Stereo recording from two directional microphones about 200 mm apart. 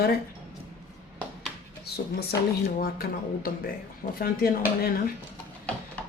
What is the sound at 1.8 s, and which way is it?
Speech, 50° left (ahead or behind).